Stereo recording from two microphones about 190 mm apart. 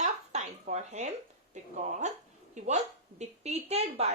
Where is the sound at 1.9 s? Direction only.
40° right (ahead or behind).